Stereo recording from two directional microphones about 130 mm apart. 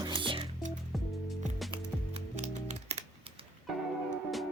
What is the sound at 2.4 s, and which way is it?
Music, 60° right (ahead or behind).